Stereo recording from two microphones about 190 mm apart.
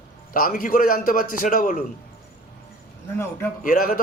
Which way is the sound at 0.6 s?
50° left (ahead or behind).